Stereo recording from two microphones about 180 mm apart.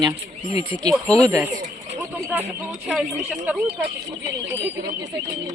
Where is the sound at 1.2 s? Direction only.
15° right (ahead or behind).